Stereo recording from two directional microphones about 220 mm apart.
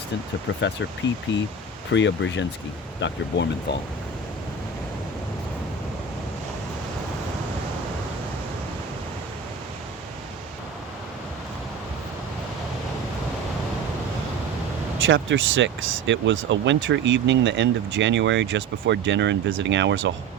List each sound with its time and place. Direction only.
1.3 s speech: 55° left (ahead or behind)
14.9 s speech: 60° right (ahead or behind)